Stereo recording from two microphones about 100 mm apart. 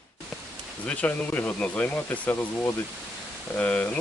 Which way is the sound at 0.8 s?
15° left (ahead or behind).